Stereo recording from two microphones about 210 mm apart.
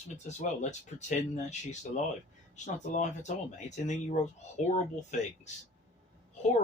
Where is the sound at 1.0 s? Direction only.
35° left (ahead or behind).